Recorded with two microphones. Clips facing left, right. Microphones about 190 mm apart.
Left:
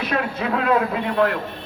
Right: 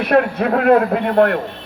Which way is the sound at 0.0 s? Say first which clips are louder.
Right 8 dB; 60° right (ahead or behind).